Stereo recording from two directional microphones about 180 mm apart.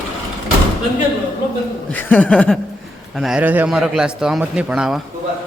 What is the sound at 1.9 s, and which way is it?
A man's voice, 10° left (ahead or behind).